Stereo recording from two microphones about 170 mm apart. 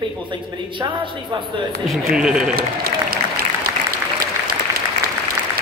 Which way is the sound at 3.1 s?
60° right (ahead or behind).